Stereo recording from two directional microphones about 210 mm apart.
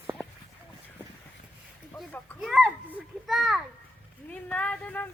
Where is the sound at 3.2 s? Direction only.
Centre (ahead or behind).